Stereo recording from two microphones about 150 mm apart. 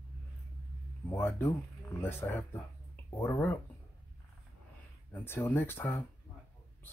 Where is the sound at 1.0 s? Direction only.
15° left (ahead or behind).